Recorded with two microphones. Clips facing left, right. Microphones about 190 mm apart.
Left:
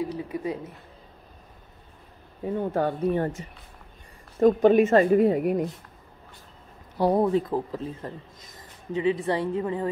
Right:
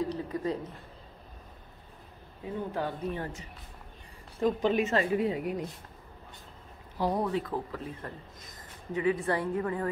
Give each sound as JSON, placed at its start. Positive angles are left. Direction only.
{"t": 0.0, "sound": "a sound", "side_deg": 10}
{"t": 2.4, "sound": "a woman's voice", "side_deg": 50}
{"t": 7.1, "sound": "speech", "side_deg": 30}
{"t": 7.7, "sound": "a woman's voice", "side_deg": 25}